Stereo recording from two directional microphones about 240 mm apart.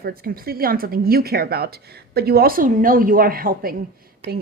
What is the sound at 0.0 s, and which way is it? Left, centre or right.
Speech, right.